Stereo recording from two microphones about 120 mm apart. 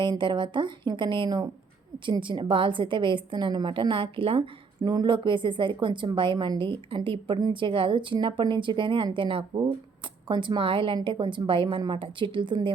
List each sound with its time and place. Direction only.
0.0 s a woman's voice: 40° right (ahead or behind)